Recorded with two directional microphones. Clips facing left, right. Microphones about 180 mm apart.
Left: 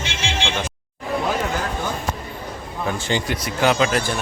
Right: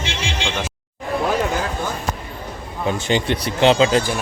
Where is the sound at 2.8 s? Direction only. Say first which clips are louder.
Right 4 dB; 20° right (ahead or behind).